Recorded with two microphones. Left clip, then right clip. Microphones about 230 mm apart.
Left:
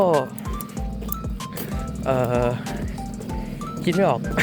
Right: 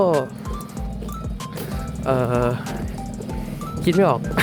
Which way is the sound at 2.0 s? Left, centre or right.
Centre.